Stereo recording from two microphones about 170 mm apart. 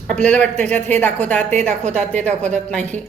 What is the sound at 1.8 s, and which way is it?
Speech, 45° right (ahead or behind).